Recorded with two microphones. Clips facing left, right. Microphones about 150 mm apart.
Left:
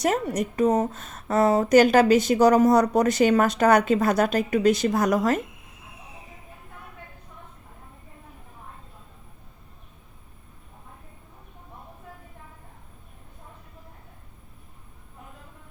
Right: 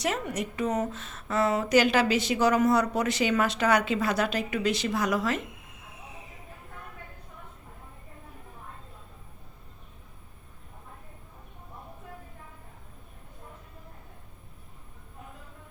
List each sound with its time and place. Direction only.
0.0 s a woman's voice: 45° left (ahead or behind)